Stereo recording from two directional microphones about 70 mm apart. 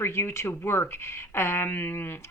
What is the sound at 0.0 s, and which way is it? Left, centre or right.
Speech, left.